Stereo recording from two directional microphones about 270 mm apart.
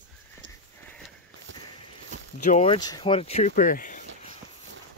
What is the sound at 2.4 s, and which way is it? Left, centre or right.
Speech, left.